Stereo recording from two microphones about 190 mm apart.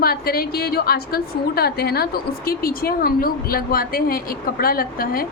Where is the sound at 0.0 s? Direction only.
55° left (ahead or behind).